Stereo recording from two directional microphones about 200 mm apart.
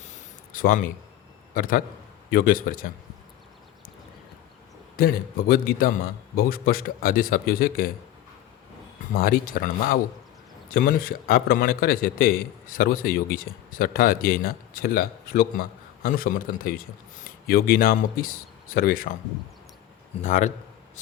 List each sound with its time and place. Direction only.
0.5 s a man's voice: 45° left (ahead or behind)
4.9 s a man's voice: 45° left (ahead or behind)
9.1 s a man's voice: 45° left (ahead or behind)
20.2 s a man's voice: 35° left (ahead or behind)